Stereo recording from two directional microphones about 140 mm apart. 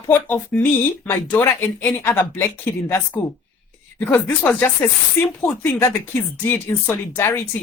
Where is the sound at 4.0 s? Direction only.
10° left (ahead or behind).